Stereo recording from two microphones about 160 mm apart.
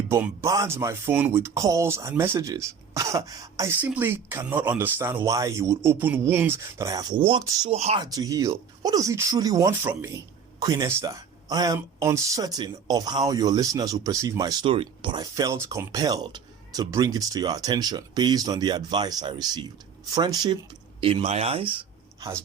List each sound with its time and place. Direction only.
0.1 s speech: 20° right (ahead or behind)
7.2 s speech: 35° right (ahead or behind)
7.9 s speech: 25° right (ahead or behind)